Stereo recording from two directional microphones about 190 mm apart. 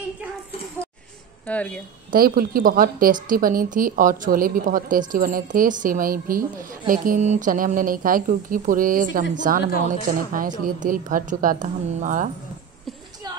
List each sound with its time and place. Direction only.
1.5 s speech: 5° left (ahead or behind)
2.1 s a woman's voice: 50° right (ahead or behind)